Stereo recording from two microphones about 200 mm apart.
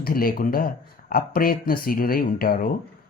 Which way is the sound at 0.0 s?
45° left (ahead or behind).